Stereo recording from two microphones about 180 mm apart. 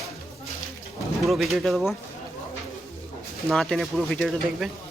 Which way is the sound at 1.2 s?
Centre (ahead or behind).